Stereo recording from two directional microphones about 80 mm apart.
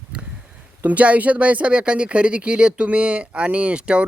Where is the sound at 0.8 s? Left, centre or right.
Centre.